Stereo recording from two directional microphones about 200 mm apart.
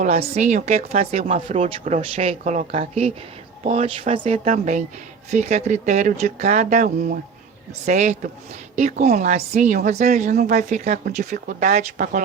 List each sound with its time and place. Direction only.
0.3 s speech: 35° right (ahead or behind)